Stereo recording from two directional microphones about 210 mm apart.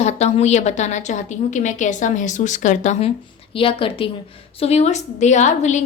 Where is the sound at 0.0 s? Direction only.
30° left (ahead or behind).